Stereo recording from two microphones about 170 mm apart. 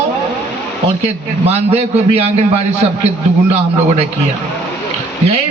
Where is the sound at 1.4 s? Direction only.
35° right (ahead or behind).